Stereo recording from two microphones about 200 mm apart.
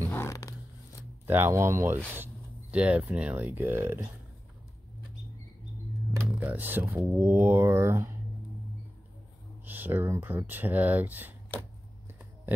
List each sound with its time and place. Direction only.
0.1 s a sound: 15° left (ahead or behind)
1.2 s speech: 10° right (ahead or behind)
6.1 s speech: 10° right (ahead or behind)
9.7 s speech: 10° right (ahead or behind)